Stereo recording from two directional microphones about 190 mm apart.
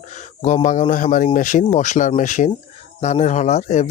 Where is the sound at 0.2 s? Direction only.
40° left (ahead or behind).